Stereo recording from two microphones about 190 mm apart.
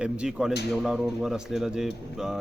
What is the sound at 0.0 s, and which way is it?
A man's voice, 5° right (ahead or behind).